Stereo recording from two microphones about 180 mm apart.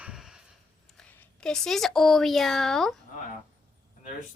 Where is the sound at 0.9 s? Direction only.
10° left (ahead or behind).